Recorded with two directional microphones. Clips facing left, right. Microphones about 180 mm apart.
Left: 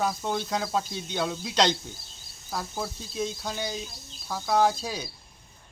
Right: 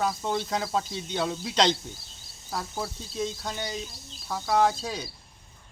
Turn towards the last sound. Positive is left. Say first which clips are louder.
# even
turn(degrees=0)  # may be behind; listen again after turning